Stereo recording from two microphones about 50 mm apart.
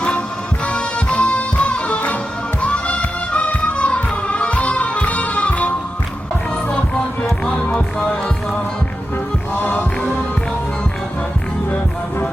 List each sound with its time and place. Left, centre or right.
0.6 s music: left
7.5 s music: left
9.6 s music: left